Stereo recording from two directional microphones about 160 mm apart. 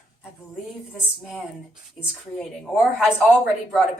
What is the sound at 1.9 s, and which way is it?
A woman's voice, 5° right (ahead or behind).